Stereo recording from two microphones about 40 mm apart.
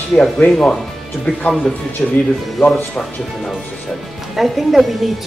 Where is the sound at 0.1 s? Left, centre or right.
Left.